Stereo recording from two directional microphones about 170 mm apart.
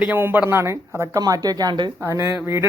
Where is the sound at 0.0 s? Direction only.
10° right (ahead or behind).